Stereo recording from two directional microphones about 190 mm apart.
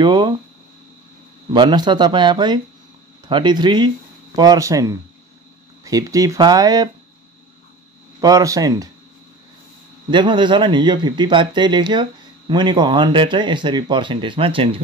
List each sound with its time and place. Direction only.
0.0 s speech: 25° right (ahead or behind)
1.5 s speech: 20° right (ahead or behind)
8.2 s speech: 20° right (ahead or behind)
10.1 s speech: 25° right (ahead or behind)